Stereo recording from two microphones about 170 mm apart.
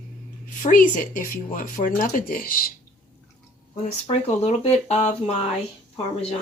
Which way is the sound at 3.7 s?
40° left (ahead or behind).